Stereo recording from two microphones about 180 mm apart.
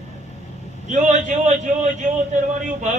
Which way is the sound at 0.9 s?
45° right (ahead or behind).